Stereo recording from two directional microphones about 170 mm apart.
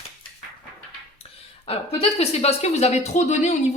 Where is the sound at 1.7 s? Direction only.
35° left (ahead or behind).